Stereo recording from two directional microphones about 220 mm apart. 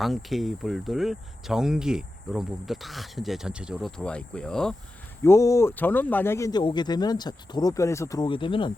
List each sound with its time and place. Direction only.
0.0 s speech: centre (ahead or behind)
5.2 s speech: 15° left (ahead or behind)